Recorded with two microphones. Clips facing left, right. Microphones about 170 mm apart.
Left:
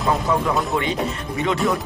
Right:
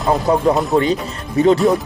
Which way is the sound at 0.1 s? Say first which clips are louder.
Right 6 dB; 40° right (ahead or behind).